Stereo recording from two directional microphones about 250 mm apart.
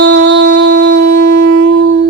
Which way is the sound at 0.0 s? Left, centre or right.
Right.